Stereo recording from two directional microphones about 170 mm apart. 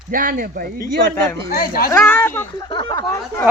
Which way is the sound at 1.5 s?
60° left (ahead or behind).